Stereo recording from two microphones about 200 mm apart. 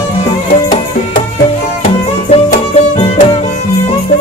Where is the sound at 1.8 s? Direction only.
35° left (ahead or behind).